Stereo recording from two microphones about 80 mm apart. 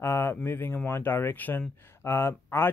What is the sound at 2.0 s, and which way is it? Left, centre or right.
Speech, left.